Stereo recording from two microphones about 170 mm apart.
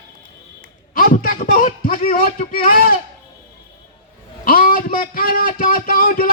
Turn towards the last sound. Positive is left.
turn(degrees=60)  # may be behind; listen again after turning